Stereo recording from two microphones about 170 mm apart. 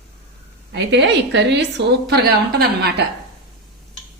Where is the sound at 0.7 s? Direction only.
90° right; by 2.9 s 70° right (ahead or behind).